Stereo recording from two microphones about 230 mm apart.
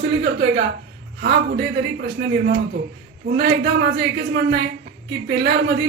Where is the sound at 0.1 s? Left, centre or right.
Right.